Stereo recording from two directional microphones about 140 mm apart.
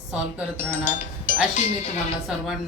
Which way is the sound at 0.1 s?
5° right (ahead or behind).